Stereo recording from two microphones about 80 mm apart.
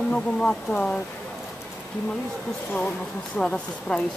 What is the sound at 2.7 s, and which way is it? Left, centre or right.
Speech, centre.